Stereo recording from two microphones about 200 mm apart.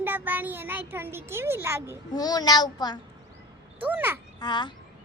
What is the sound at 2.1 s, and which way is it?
Speech, 20° left (ahead or behind).